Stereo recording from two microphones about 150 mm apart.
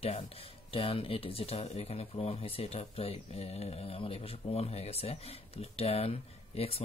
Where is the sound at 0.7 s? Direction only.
40° left (ahead or behind).